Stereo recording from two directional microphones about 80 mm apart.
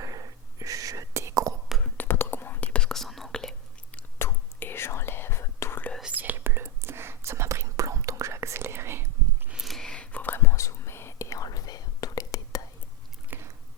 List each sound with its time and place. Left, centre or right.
0.0 s whispering: right
2.0 s whispering: left
2.7 s whispering: centre
4.2 s whispering: left
6.0 s whispering: centre
9.5 s a sound: centre
9.8 s whispering: centre; by 12.6 s left